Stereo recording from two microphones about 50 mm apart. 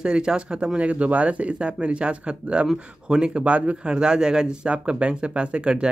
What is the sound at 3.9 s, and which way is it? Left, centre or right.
Speech, centre.